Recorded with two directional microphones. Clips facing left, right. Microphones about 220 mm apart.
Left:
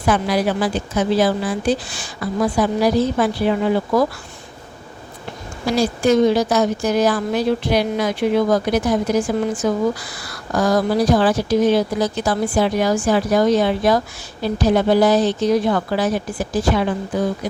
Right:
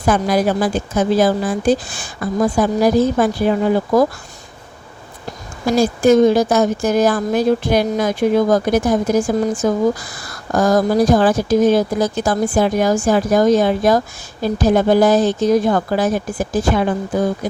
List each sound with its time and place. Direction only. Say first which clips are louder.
0.0 s a woman's voice: right 2 dB; 45° right (ahead or behind)
5.2 s a woman's voice: right 3 dB; 45° right (ahead or behind)